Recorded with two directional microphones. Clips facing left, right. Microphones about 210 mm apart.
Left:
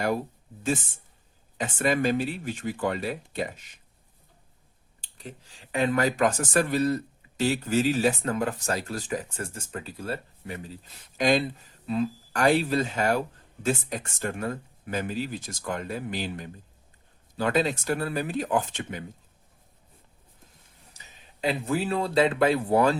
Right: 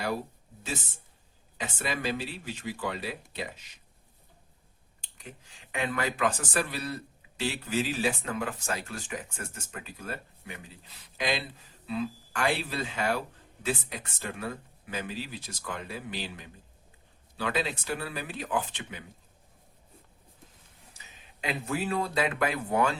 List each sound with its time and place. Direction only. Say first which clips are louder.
1.5 s speech: left 8 dB; 50° left (ahead or behind)
4.9 s clicking: left 5 dB; 35° left (ahead or behind)
5.7 s speech: left 7 dB; 40° left (ahead or behind)
21.4 s speech: left 5 dB; 30° left (ahead or behind)